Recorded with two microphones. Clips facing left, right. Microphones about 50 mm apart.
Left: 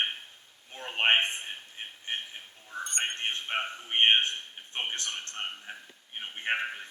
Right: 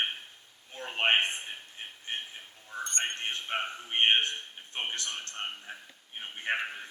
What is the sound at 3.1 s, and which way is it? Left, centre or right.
Speech, left.